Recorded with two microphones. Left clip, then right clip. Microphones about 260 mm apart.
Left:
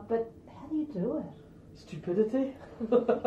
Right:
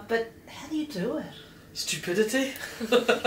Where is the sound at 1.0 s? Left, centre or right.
Centre.